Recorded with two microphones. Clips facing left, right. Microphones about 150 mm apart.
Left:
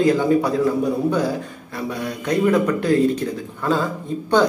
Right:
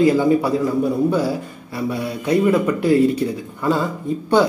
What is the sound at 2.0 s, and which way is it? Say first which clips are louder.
Speech: right 2 dB; 10° right (ahead or behind).